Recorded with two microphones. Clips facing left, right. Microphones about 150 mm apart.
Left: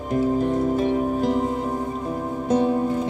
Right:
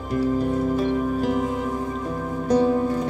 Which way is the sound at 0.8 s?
40° left (ahead or behind).